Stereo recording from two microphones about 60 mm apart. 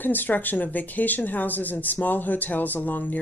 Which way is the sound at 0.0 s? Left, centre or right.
Left.